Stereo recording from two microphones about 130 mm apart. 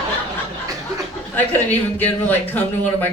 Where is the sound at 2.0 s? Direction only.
15° left (ahead or behind).